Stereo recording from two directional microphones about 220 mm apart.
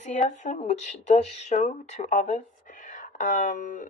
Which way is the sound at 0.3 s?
35° left (ahead or behind).